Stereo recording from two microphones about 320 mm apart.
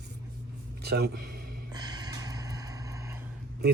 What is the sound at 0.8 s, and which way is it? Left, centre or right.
Speech, right.